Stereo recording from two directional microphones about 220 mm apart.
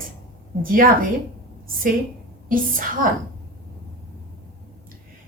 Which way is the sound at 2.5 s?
40° right (ahead or behind).